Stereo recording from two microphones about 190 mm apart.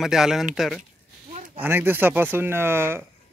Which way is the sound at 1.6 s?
10° right (ahead or behind).